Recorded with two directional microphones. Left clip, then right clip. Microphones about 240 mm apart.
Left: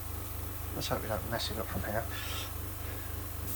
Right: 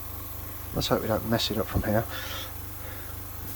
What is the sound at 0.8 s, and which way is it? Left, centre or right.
Speech, right.